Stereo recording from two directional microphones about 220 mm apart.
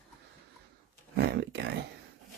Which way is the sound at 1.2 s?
50° right (ahead or behind).